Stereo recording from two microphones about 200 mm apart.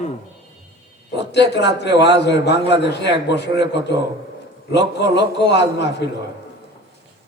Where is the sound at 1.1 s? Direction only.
60° left (ahead or behind).